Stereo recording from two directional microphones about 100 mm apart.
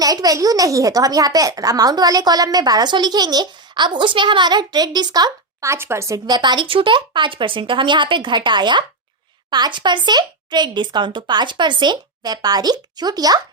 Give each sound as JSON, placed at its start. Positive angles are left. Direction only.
{"t": 0.0, "sound": "speech", "side_deg": -40}
{"t": 6.2, "sound": "speech", "side_deg": -45}